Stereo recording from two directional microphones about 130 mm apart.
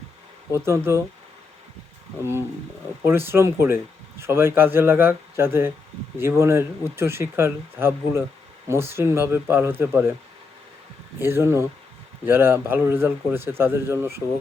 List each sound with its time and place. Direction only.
0.5 s speech: 20° right (ahead or behind)
3.0 s speech: 20° right (ahead or behind)
11.2 s speech: 20° right (ahead or behind)